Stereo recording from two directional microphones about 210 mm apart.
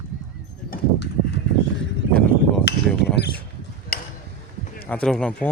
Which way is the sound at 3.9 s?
45° left (ahead or behind).